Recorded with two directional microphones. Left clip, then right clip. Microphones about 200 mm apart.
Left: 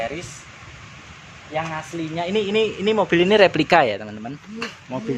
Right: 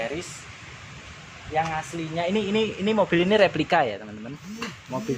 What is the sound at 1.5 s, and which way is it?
Speech, 25° left (ahead or behind).